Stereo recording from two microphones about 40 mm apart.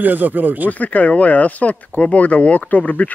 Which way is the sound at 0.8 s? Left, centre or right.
Left.